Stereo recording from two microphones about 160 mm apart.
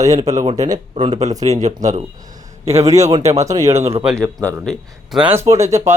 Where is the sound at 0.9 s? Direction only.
45° right (ahead or behind).